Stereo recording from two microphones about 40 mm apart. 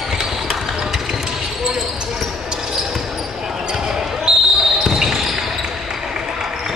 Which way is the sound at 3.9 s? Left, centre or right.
Centre.